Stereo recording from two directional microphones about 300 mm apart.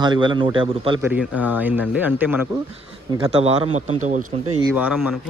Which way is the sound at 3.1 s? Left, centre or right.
Centre.